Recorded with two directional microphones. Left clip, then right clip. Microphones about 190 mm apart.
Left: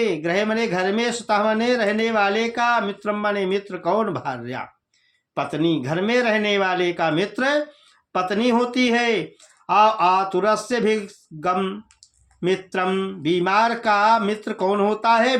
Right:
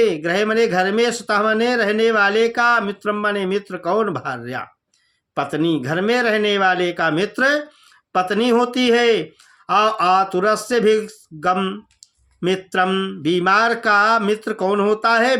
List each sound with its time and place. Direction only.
0.0 s speech: 25° right (ahead or behind)